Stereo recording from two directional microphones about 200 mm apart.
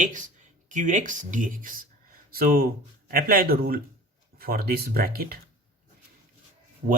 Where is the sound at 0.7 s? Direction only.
40° right (ahead or behind).